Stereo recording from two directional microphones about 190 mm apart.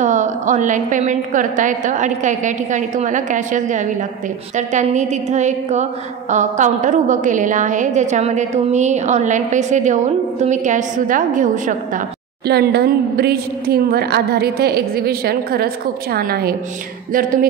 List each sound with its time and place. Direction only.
0.0 s a woman's voice: 40° right (ahead or behind)
12.4 s a woman's voice: 55° right (ahead or behind)
17.1 s a capella: 45° right (ahead or behind)